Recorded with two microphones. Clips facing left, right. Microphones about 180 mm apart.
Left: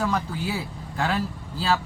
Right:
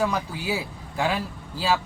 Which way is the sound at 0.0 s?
10° right (ahead or behind).